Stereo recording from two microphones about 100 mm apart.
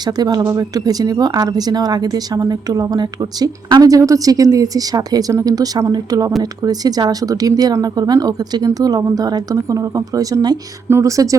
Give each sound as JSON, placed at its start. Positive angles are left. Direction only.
{"t": 0.0, "sound": "speech", "side_deg": -45}
{"t": 10.8, "sound": "speech", "side_deg": -25}